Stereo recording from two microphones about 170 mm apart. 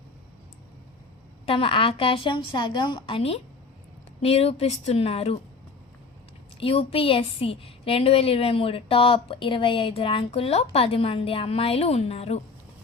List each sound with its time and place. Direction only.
1.5 s a woman's voice: 30° left (ahead or behind)
6.6 s a woman's voice: 35° left (ahead or behind)